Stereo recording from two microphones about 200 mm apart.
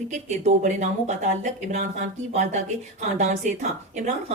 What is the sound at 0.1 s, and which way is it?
Speech, 35° right (ahead or behind).